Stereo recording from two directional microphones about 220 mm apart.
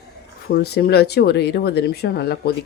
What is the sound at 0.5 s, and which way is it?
Speech, 45° left (ahead or behind).